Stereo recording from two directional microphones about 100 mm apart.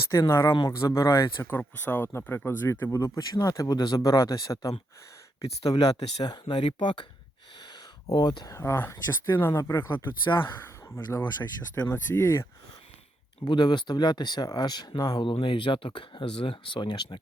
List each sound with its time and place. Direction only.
0.1 s speech: 25° left (ahead or behind)
3.0 s speech: 35° left (ahead or behind)
5.7 s speech: 40° left (ahead or behind)
6.4 s speech: 55° left (ahead or behind)
8.1 s speech: 45° left (ahead or behind)
8.4 s speech: 30° left (ahead or behind)
13.4 s speech: 50° left (ahead or behind)